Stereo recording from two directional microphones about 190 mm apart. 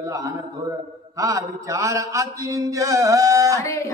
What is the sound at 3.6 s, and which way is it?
Speech, 15° left (ahead or behind).